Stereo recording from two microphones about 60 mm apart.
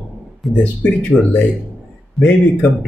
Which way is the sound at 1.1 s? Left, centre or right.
Left.